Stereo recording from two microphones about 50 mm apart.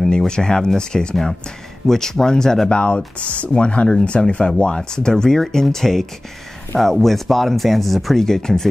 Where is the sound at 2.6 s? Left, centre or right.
Left.